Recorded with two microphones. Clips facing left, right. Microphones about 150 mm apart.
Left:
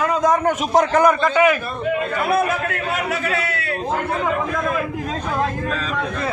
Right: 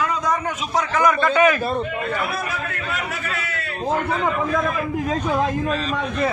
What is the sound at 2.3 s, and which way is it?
A man's voice, 70° left (ahead or behind).